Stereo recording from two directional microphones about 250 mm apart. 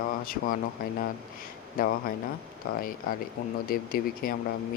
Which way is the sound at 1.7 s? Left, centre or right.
Left.